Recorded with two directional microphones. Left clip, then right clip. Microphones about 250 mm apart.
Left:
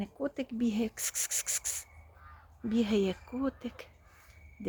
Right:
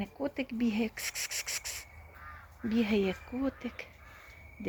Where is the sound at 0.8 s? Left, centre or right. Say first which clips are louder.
Even; centre.